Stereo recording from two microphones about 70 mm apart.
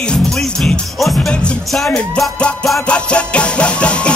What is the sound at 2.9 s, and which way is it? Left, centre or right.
Music, centre.